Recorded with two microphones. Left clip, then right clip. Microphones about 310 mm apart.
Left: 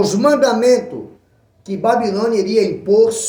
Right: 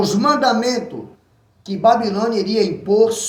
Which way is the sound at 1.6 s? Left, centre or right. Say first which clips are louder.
Right 1 dB; centre.